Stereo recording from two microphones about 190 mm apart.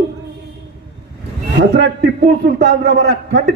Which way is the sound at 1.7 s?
60° right (ahead or behind).